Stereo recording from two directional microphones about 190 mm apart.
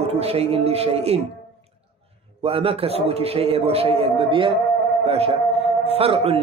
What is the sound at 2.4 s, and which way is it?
Speech, 30° right (ahead or behind).